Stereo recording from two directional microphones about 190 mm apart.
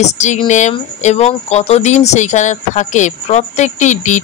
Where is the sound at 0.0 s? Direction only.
35° left (ahead or behind).